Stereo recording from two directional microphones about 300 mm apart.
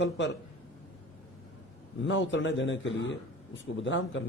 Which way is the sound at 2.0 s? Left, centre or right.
Left.